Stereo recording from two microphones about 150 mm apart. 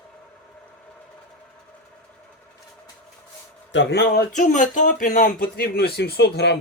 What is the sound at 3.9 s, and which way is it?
Speech, 90° left.